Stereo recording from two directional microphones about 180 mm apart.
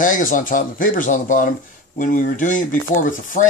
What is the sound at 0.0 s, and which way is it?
Speech, 45° left (ahead or behind).